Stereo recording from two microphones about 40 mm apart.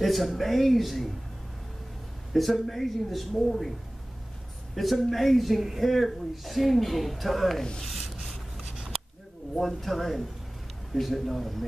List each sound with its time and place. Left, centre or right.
0.0 s speech: centre
2.3 s speech: centre
4.7 s speech: centre
7.8 s rub: centre
8.7 s a sound: centre
9.6 s speech: centre